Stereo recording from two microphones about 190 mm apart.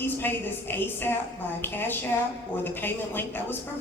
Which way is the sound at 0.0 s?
10° left (ahead or behind).